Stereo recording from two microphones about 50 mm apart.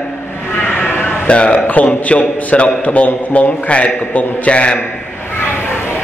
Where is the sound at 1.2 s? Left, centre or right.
Left.